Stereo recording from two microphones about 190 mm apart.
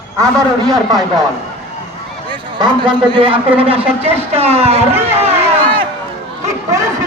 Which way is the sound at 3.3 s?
5° right (ahead or behind).